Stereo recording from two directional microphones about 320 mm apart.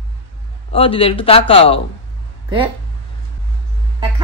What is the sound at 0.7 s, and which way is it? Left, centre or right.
A man's voice, centre.